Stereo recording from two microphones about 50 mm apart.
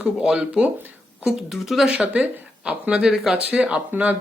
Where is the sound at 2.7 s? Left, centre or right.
Right.